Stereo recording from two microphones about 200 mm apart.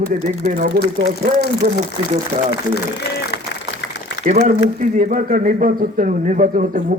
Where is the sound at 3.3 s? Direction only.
60° left (ahead or behind).